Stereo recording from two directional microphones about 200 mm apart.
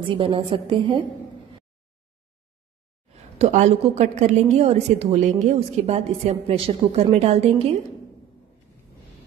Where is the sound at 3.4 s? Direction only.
35° right (ahead or behind).